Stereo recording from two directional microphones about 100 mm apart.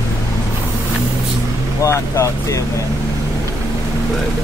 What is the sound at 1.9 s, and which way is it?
Speech, 30° left (ahead or behind).